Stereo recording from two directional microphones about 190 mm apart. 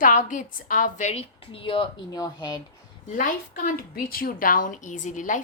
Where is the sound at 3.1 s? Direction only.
45° left (ahead or behind).